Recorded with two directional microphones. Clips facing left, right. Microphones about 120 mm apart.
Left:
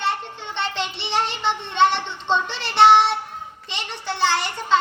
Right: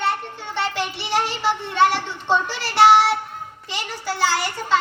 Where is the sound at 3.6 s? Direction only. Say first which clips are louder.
Right 3 dB; 25° left (ahead or behind).